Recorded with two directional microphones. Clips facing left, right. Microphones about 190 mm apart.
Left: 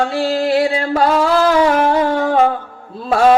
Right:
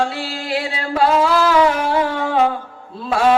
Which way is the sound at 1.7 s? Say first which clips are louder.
Left 4 dB; 45° left (ahead or behind).